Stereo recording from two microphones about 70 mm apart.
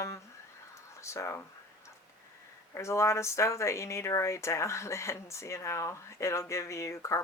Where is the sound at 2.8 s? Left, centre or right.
Left.